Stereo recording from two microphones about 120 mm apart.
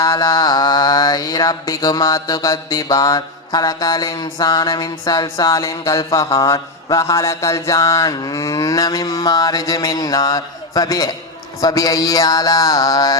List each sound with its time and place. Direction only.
0.0 s mantra: 30° left (ahead or behind)
6.1 s a sound: 30° left (ahead or behind)
11.6 s mantra: 30° left (ahead or behind)